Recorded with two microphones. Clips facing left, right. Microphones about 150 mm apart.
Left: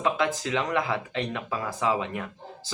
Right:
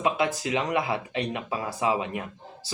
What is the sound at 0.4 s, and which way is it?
A man's voice, 15° right (ahead or behind).